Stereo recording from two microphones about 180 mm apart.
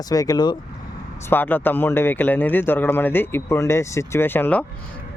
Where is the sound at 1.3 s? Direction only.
10° left (ahead or behind).